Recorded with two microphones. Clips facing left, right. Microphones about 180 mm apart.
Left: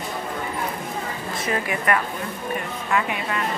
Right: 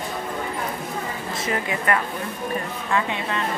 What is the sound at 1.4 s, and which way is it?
Speech, 25° right (ahead or behind).